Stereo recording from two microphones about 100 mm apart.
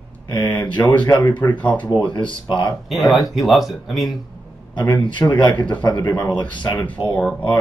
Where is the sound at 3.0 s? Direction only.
Centre (ahead or behind).